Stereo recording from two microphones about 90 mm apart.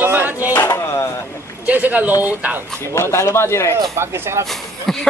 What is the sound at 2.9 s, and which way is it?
Speech, 30° left (ahead or behind).